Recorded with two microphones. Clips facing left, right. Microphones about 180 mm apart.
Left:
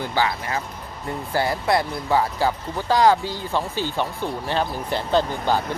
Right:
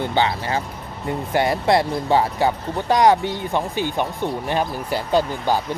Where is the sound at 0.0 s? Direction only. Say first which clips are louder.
Right 3 dB; 25° right (ahead or behind).